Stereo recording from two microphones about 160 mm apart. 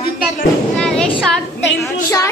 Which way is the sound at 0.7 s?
5° left (ahead or behind).